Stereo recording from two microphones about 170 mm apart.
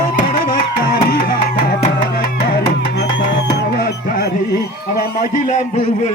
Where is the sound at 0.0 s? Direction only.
55° left (ahead or behind).